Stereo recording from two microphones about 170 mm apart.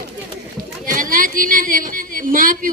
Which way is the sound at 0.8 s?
50° right (ahead or behind).